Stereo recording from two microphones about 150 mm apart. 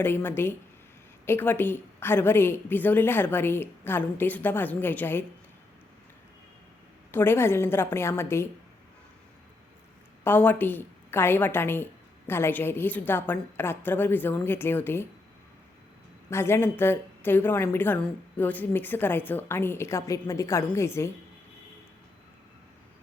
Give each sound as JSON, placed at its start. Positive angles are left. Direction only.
{"t": 0.0, "sound": "a woman's voice", "side_deg": 15}
{"t": 7.1, "sound": "a woman's voice", "side_deg": 15}
{"t": 10.2, "sound": "a woman's voice", "side_deg": 15}
{"t": 16.3, "sound": "a woman's voice", "side_deg": 15}